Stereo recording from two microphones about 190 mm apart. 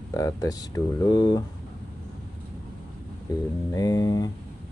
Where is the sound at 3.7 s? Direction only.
20° left (ahead or behind).